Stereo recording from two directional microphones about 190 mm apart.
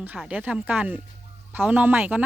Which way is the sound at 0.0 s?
5° right (ahead or behind).